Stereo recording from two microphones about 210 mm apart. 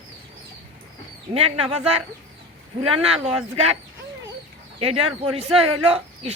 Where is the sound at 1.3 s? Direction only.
30° right (ahead or behind).